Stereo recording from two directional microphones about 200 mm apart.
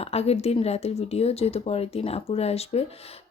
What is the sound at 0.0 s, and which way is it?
Speech, 30° left (ahead or behind).